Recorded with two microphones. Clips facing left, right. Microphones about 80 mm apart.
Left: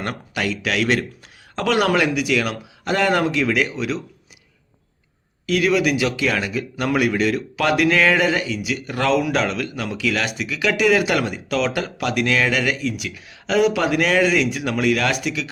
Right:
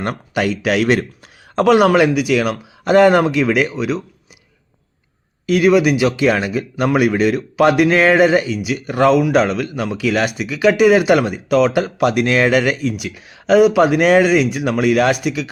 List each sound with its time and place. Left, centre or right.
0.0 s a man's voice: right
2.8 s speech: right
5.5 s speech: centre